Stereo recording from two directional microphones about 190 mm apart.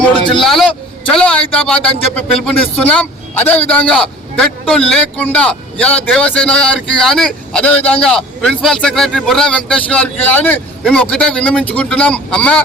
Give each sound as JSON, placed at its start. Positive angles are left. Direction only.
{"t": 0.4, "sound": "a man's voice", "side_deg": 0}